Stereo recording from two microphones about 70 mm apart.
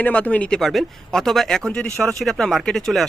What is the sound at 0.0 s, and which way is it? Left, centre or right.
Speech, left.